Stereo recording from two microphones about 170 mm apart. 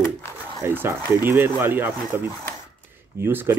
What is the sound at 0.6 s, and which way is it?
Speech, 15° right (ahead or behind).